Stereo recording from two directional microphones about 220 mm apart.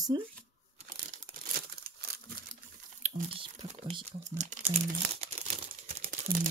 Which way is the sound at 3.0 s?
30° right (ahead or behind).